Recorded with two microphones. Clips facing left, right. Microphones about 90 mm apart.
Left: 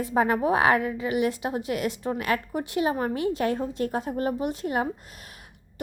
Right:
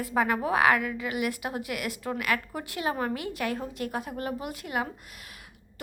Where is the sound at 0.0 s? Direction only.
25° left (ahead or behind).